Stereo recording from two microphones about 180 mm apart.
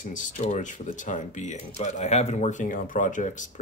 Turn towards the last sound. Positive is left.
turn(degrees=45)  # may be behind; listen again after turning